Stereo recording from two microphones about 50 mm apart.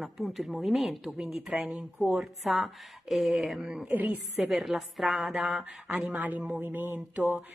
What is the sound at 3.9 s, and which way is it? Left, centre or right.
Mantra, right.